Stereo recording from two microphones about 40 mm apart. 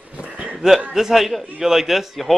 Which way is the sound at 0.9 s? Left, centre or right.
Centre.